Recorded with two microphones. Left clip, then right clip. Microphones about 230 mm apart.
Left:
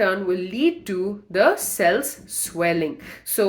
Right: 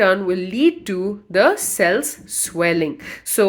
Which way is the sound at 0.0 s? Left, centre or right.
Right.